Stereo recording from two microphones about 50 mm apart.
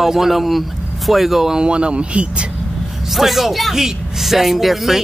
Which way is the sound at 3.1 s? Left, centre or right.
Centre.